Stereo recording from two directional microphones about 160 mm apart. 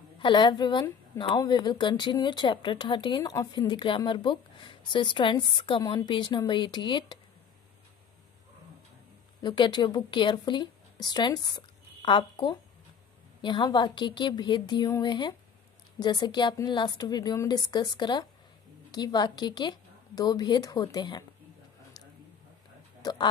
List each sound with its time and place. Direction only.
0.2 s speech: 30° left (ahead or behind)
9.4 s a woman's voice: 30° left (ahead or behind)
23.0 s speech: 25° left (ahead or behind)